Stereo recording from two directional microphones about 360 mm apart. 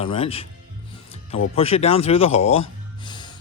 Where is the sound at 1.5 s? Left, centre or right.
Centre.